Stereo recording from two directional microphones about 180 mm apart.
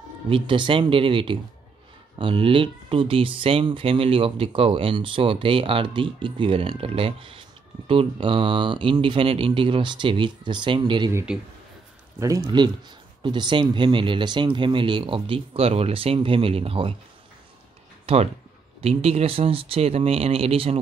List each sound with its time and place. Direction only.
0.3 s speech: 30° right (ahead or behind)
18.0 s speech: 35° right (ahead or behind)